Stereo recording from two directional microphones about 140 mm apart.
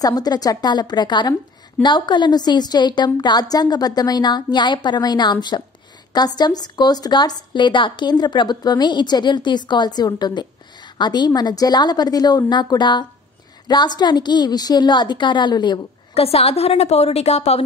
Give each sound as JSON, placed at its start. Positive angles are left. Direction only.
{"t": 0.0, "sound": "a woman's voice", "side_deg": 30}
{"t": 16.2, "sound": "a woman's voice", "side_deg": 45}